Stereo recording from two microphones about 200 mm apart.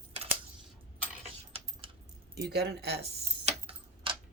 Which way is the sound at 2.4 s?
55° right (ahead or behind).